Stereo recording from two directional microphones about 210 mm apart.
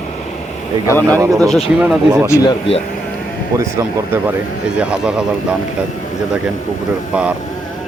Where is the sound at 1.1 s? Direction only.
15° right (ahead or behind).